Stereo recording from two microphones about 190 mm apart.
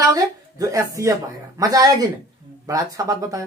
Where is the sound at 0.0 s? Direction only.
20° right (ahead or behind).